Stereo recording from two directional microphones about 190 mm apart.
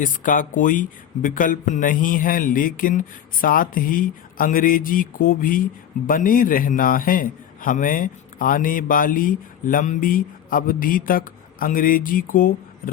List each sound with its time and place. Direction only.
0.0 s a man's voice: 45° left (ahead or behind)